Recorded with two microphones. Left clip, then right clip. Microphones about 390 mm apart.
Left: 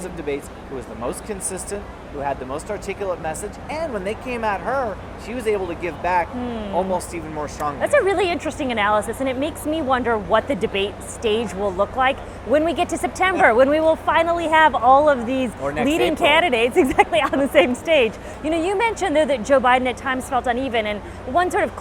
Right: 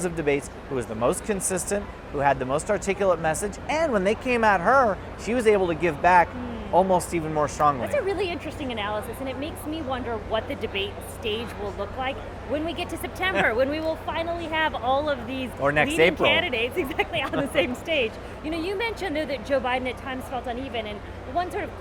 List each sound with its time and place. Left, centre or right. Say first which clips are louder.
0.0 s speech: right 2 dB; right
7.9 s speech: left 8 dB; left
15.6 s speech: right 5 dB; right
16.1 s speech: left 6 dB; left